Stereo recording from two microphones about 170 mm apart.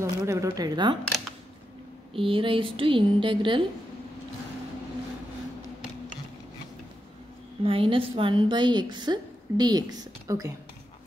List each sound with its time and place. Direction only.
0.0 s a woman's voice: 20° right (ahead or behind)
2.1 s a woman's voice: 30° right (ahead or behind)
7.6 s a woman's voice: 30° right (ahead or behind)